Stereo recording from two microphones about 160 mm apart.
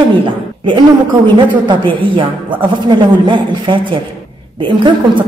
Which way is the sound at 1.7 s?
30° right (ahead or behind).